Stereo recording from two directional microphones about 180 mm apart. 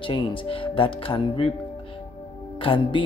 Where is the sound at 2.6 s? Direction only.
30° left (ahead or behind).